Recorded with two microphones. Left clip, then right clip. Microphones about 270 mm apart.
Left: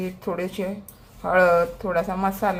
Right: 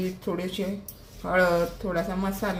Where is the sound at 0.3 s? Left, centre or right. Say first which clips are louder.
Left 5 dB; left.